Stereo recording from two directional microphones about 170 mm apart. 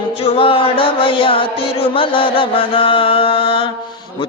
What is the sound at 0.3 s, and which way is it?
Music, 30° left (ahead or behind).